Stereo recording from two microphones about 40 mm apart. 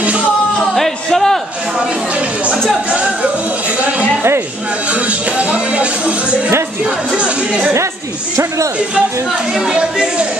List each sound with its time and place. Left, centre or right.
0.7 s a sound: centre
4.8 s music: right
7.1 s chatter: right
9.5 s speech: centre
9.8 s speech: right